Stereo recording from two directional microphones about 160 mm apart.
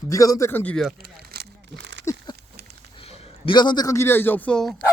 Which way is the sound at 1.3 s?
85° right.